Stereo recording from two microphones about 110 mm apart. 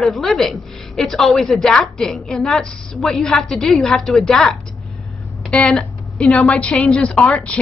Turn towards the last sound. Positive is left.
turn(degrees=10)  # may be behind; listen again after turning